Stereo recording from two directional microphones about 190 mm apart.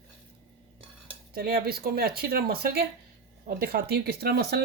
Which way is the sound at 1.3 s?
55° right (ahead or behind).